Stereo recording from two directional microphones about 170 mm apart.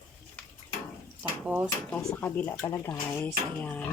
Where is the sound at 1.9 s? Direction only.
10° left (ahead or behind).